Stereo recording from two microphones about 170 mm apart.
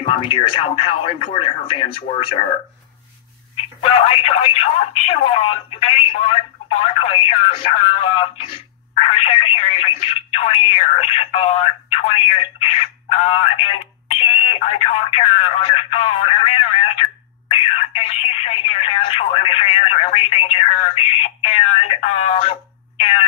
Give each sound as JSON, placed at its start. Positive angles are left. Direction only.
{"t": 0.0, "sound": "speech", "side_deg": 30}
{"t": 3.8, "sound": "speech", "side_deg": 35}